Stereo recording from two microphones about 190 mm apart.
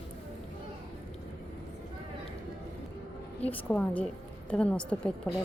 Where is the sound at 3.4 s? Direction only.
10° left (ahead or behind).